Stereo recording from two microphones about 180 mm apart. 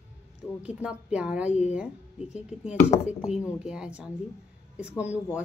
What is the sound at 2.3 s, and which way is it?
A woman's voice, 5° right (ahead or behind).